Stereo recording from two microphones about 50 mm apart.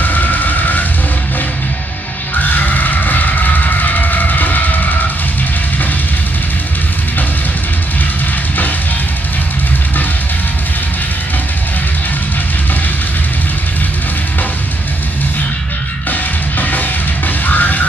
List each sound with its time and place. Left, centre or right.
0.0 s vehicle: left
2.3 s music: left
16.1 s music: left